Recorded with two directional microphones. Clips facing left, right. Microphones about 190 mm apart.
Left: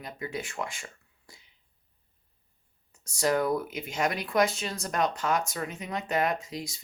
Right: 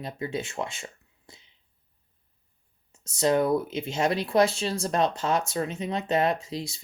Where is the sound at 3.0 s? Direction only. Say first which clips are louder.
Right 3 dB; 25° right (ahead or behind).